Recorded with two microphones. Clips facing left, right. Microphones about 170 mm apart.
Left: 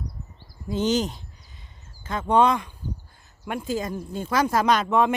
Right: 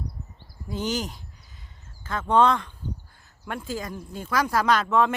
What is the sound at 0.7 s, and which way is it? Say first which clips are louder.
Speech: left 5 dB; 25° left (ahead or behind).